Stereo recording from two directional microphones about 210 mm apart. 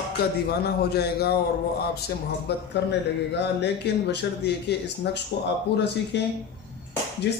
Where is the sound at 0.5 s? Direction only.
50° left (ahead or behind).